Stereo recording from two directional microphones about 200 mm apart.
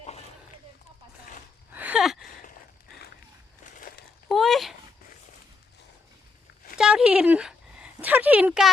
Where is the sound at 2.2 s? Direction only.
40° left (ahead or behind).